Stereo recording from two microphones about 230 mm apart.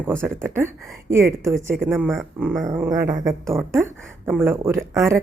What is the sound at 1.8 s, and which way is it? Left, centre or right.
Speech, centre.